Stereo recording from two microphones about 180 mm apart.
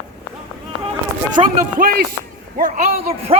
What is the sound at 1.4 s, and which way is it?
Speech, 25° right (ahead or behind).